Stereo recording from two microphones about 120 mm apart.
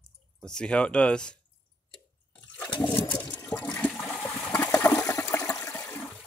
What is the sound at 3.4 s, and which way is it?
Toilet flush, 15° left (ahead or behind).